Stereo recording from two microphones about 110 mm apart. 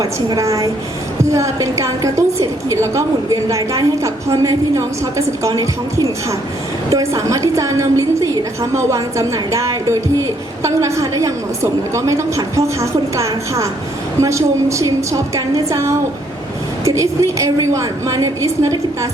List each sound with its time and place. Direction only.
0.0 s a woman's voice: 30° right (ahead or behind)